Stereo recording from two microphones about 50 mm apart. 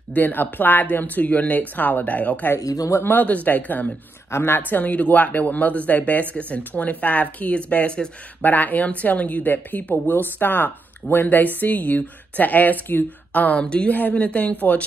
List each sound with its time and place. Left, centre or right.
0.1 s speech: left
2.5 s speech: left
3.1 s speech: left
4.3 s a woman's voice: left
4.6 s speech: left
8.4 s speech: left
13.6 s speech: left
13.8 s speech: left